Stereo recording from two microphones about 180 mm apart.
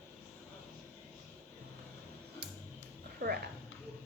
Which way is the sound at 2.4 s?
65° right (ahead or behind).